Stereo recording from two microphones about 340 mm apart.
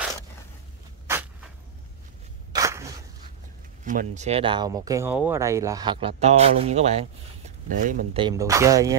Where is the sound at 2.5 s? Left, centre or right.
Centre.